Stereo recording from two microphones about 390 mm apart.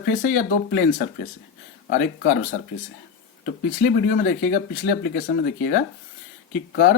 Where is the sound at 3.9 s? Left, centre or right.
Left.